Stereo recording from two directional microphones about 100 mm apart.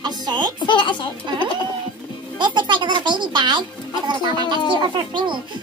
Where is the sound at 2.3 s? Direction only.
50° right (ahead or behind).